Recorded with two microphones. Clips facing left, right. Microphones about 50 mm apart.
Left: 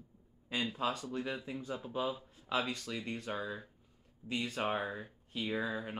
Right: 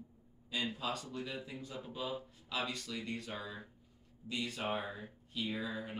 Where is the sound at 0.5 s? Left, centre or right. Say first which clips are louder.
Left 3 dB; left.